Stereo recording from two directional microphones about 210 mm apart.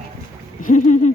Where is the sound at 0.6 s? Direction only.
35° left (ahead or behind).